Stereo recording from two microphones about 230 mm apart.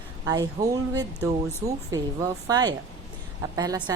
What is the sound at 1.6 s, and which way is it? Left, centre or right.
A woman's voice, centre.